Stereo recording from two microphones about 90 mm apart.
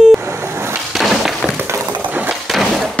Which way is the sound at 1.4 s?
20° right (ahead or behind).